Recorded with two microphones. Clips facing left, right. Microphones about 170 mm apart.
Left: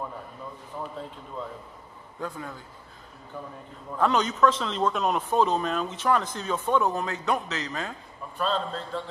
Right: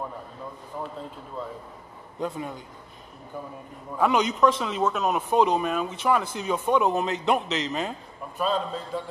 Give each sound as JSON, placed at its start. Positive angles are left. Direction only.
{"t": 0.8, "sound": "speech", "side_deg": 0}
{"t": 2.1, "sound": "a man's voice", "side_deg": -20}
{"t": 3.9, "sound": "speech", "side_deg": -10}